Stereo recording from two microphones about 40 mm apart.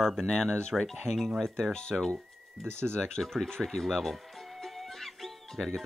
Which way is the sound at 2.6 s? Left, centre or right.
Right.